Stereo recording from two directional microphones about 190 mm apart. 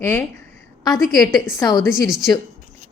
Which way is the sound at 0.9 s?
Centre (ahead or behind).